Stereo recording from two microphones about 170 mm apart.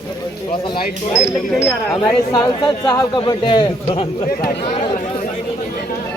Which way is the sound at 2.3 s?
25° left (ahead or behind).